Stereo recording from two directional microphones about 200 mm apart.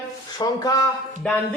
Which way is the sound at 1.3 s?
5° left (ahead or behind).